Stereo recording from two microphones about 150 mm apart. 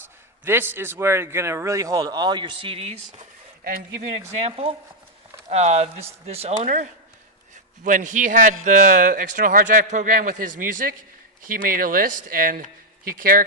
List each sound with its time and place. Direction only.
0.4 s speech: 15° right (ahead or behind); by 3.0 s 40° right (ahead or behind)
3.6 s speech: 80° right
4.4 s a man's voice: 40° right (ahead or behind); by 13.4 s 70° right (ahead or behind)